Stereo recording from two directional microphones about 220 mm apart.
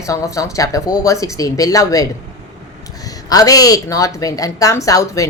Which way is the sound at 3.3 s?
15° left (ahead or behind).